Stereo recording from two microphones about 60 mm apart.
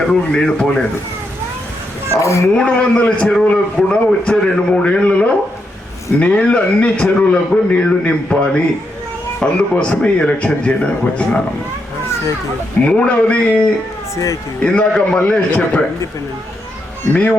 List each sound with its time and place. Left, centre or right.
0.1 s a man's voice: centre
2.2 s speech: left
2.6 s a man's voice: centre
12.8 s a man's voice: centre